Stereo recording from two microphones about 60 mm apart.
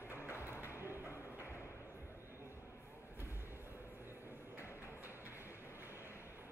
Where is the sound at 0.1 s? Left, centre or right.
Left.